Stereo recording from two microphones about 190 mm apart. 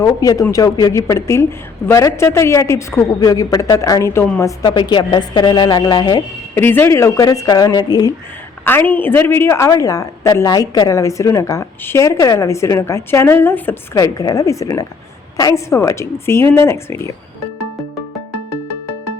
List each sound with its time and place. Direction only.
0.0 s a woman's voice: 20° left (ahead or behind)
6.6 s a woman's voice: 10° left (ahead or behind)